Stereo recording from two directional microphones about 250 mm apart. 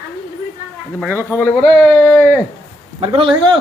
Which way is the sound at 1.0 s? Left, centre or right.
Centre.